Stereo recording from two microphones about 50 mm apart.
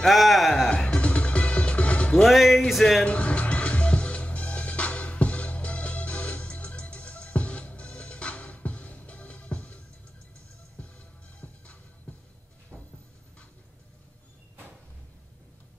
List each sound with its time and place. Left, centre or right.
0.0 s music: centre
0.8 s music: left
2.2 s speech: centre
3.0 s music: left
11.4 s music: left